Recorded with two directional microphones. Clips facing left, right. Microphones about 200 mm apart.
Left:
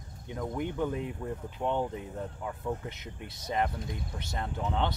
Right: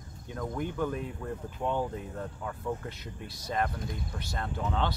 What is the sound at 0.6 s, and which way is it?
Speech, 20° left (ahead or behind).